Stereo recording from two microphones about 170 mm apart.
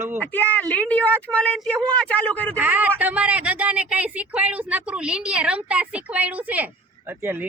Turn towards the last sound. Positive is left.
turn(degrees=-15)  # may be behind; listen again after turning